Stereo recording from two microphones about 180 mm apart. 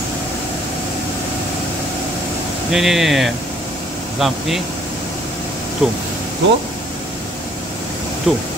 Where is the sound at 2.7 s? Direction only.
Centre (ahead or behind).